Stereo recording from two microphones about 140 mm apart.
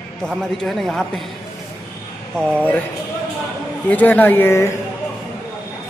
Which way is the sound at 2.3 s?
10° left (ahead or behind).